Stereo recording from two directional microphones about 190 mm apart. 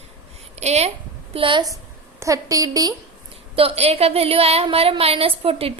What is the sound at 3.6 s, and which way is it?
A woman's voice, 30° right (ahead or behind).